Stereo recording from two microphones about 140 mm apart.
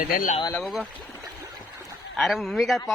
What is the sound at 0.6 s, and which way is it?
Speech, centre (ahead or behind).